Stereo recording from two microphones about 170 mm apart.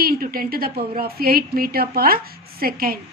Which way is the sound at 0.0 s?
60° right (ahead or behind).